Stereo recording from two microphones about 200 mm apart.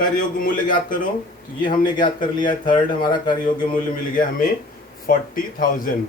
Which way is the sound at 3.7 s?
45° left (ahead or behind).